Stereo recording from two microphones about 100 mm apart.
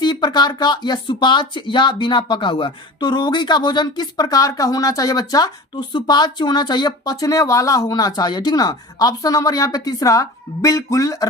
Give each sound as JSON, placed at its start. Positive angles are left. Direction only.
{"t": 0.0, "sound": "speech", "side_deg": 45}